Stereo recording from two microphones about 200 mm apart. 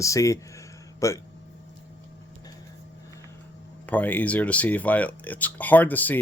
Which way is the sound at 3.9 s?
10° left (ahead or behind).